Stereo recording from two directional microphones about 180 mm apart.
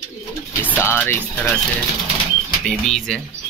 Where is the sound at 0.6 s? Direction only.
10° left (ahead or behind).